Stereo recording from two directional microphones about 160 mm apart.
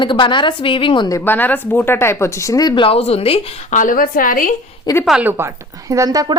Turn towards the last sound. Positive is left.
turn(degrees=-20)  # may be behind; listen again after turning